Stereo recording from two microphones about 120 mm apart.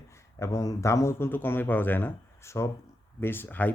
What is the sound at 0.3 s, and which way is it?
Speech, 25° left (ahead or behind).